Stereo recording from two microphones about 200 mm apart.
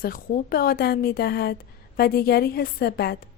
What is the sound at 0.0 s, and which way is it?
A woman's voice, 45° left (ahead or behind).